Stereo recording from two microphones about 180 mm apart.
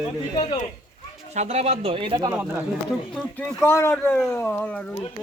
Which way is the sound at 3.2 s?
10° left (ahead or behind).